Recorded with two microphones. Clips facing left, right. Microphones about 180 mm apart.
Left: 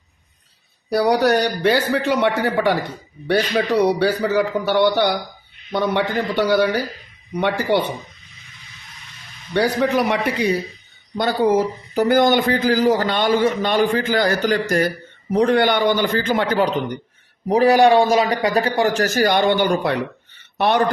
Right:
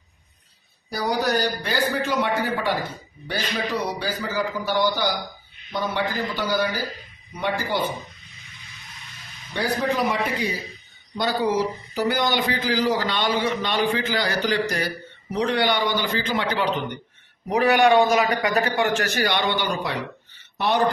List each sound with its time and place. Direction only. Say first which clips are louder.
0.9 s a man's voice: left 8 dB; 70° left (ahead or behind)
9.5 s a man's voice: left 6 dB; 70° left (ahead or behind)
11.2 s a man's voice: left 5 dB; 50° left (ahead or behind)